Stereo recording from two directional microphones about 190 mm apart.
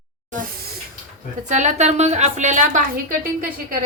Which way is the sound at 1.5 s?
40° right (ahead or behind).